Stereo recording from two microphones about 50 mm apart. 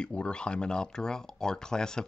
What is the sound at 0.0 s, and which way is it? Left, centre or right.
Speech, centre.